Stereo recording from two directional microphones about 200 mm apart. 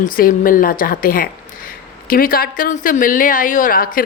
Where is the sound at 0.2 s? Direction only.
45° left (ahead or behind).